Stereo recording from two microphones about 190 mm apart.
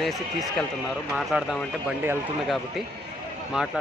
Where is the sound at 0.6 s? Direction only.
5° right (ahead or behind).